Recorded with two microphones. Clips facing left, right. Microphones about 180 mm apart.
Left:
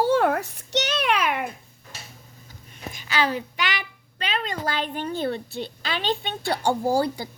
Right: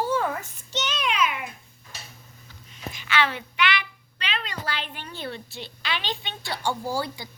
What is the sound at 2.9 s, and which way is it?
A child's voice, 40° left (ahead or behind).